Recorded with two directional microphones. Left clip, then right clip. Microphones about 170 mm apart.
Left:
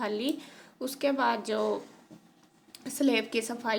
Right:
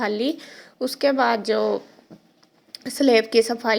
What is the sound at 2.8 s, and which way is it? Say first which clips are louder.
Speech: right 10 dB; 40° right (ahead or behind).